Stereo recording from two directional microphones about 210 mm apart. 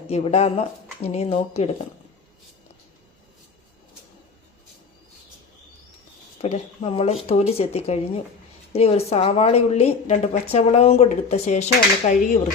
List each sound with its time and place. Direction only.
0.1 s speech: 30° left (ahead or behind)
6.4 s speech: 30° left (ahead or behind)